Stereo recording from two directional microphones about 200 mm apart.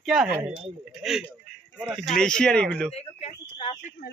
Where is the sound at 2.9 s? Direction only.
30° left (ahead or behind).